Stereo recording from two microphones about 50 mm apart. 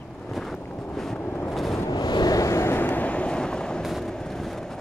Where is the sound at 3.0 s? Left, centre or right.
Left.